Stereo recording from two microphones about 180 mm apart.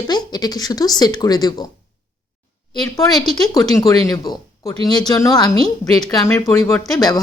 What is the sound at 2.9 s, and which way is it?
Speech, 20° left (ahead or behind).